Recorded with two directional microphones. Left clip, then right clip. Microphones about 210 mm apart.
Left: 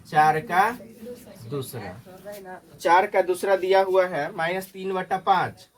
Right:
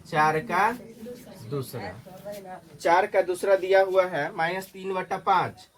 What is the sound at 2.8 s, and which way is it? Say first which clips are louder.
Speech: left 2 dB; 35° left (ahead or behind).